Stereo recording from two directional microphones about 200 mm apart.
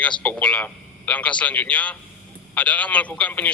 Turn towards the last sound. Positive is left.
turn(degrees=5)  # may be behind; listen again after turning